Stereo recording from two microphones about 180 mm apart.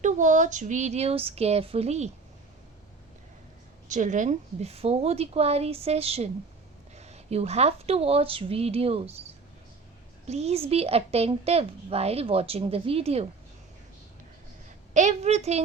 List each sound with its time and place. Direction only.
0.0 s a woman's voice: 45° right (ahead or behind)
3.8 s a woman's voice: 45° right (ahead or behind)
10.2 s a woman's voice: 35° right (ahead or behind)
14.9 s a woman's voice: 40° right (ahead or behind)